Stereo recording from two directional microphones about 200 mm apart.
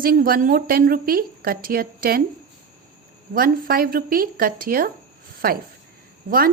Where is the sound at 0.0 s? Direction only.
45° right (ahead or behind).